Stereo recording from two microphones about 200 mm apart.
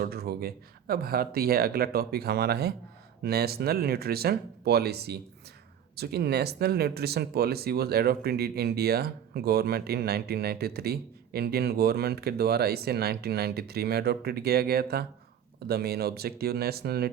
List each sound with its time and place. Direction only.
0.0 s speech: 50° right (ahead or behind)